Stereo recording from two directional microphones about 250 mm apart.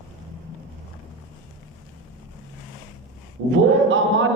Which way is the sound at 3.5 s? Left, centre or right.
Right.